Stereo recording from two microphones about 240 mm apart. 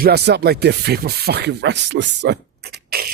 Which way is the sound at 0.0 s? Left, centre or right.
Right.